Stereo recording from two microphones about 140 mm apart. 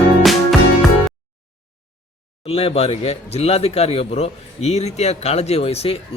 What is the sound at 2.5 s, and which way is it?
A man's voice, 45° left (ahead or behind).